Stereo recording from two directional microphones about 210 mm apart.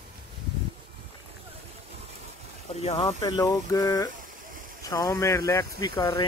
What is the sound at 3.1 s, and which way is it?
Speech, 20° left (ahead or behind).